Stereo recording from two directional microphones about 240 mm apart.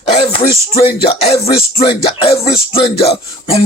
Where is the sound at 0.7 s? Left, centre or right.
Left.